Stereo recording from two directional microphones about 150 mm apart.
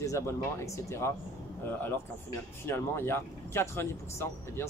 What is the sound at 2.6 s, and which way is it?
Speech, 15° left (ahead or behind).